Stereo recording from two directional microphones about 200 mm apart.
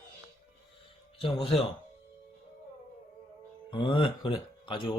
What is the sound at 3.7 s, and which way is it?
Speech, 25° left (ahead or behind).